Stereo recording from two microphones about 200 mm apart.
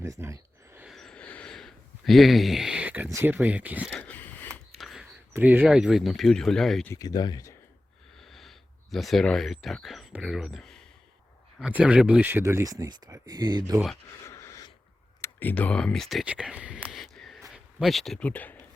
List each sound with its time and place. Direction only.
0.0 s a sound: 15° right (ahead or behind)
0.9 s a sound: centre (ahead or behind)
3.9 s a sound: 5° left (ahead or behind)
5.3 s speech: 10° right (ahead or behind)
6.9 s speech: 20° left (ahead or behind)
8.3 s speech: centre (ahead or behind); by 13.7 s 20° right (ahead or behind)
13.7 s speech: centre (ahead or behind)
14.3 s gasp: 15° left (ahead or behind)
15.2 s speech: 10° left (ahead or behind)